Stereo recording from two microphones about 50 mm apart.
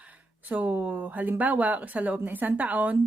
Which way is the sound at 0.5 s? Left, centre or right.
Right.